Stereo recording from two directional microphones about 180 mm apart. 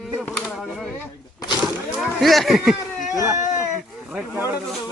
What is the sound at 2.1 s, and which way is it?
Speech, centre (ahead or behind).